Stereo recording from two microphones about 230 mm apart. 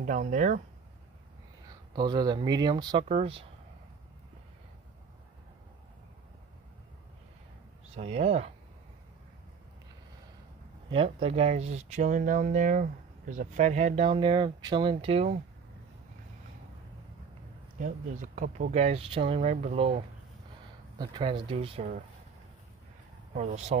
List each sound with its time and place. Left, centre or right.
0.0 s speech: right
1.7 s speech: centre
7.9 s speech: right
10.9 s speech: right
17.7 s speech: right
21.0 s speech: centre
23.3 s speech: right